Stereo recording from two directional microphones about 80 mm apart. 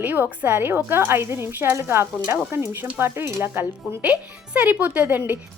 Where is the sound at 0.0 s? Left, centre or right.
Right.